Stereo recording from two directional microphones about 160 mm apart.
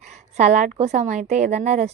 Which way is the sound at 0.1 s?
45° right (ahead or behind).